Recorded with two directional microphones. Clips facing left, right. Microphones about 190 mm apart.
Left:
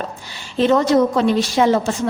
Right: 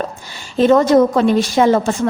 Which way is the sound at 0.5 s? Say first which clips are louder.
Right 4 dB; 45° right (ahead or behind).